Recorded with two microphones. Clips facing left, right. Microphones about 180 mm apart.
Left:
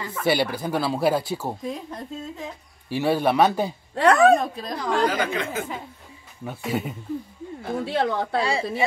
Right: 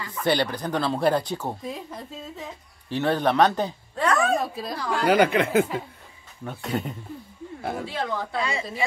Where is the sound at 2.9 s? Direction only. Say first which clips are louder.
Left 1 dB; 10° left (ahead or behind).